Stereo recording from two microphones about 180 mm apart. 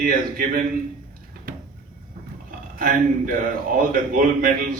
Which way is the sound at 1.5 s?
50° right (ahead or behind).